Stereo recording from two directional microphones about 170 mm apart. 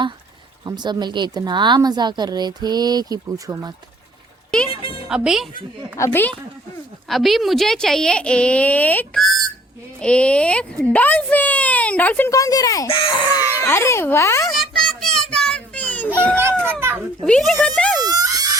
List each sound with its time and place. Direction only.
0.6 s a woman's voice: 25° right (ahead or behind)
4.7 s music: 30° left (ahead or behind)
5.0 s a woman's voice: 5° right (ahead or behind)
6.0 s speech: 10° left (ahead or behind)
7.1 s a woman's voice: centre (ahead or behind); by 14.4 s 15° left (ahead or behind)
14.5 s children playing: centre (ahead or behind)
16.1 s a woman's voice: 10° left (ahead or behind)
18.0 s screaming: 20° right (ahead or behind)